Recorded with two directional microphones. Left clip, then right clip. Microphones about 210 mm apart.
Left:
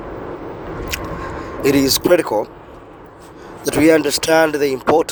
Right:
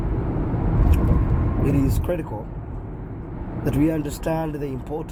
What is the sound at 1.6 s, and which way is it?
Speech, 30° left (ahead or behind).